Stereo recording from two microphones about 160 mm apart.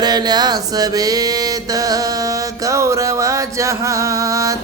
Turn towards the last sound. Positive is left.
turn(degrees=-20)  # may be behind; listen again after turning